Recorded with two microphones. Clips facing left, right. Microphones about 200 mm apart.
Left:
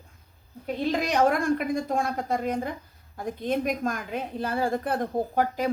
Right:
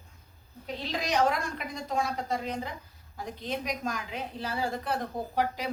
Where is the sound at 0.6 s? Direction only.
50° left (ahead or behind).